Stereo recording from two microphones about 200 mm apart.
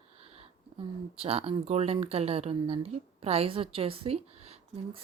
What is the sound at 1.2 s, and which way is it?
Speech, 30° right (ahead or behind).